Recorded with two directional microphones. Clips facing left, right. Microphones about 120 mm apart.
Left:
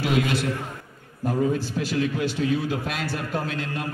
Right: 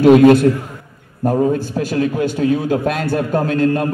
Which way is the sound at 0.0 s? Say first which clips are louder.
Right 16 dB; 50° right (ahead or behind).